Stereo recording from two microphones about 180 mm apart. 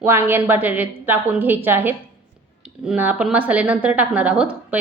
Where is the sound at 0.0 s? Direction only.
10° right (ahead or behind).